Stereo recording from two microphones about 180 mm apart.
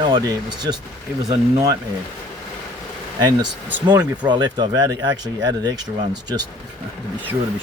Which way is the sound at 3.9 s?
25° right (ahead or behind).